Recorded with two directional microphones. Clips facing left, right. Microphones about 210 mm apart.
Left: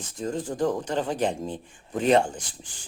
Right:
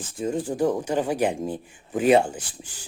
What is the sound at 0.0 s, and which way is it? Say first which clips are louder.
Speech: right 3 dB; 5° right (ahead or behind).